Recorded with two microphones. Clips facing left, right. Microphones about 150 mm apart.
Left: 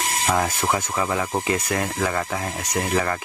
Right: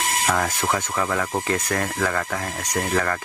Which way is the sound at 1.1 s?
10° left (ahead or behind).